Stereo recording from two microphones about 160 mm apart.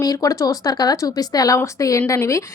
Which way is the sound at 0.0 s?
20° left (ahead or behind).